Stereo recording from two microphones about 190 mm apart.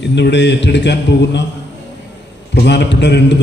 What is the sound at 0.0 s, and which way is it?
Speech, 65° left (ahead or behind).